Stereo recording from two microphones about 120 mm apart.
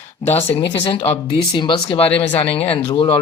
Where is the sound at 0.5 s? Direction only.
45° left (ahead or behind).